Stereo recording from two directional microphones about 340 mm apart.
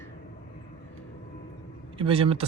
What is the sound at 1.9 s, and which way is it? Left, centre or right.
Speech, centre.